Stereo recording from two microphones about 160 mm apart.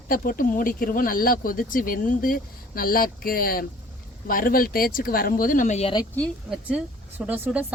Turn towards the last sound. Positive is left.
turn(degrees=-10)  # may be behind; listen again after turning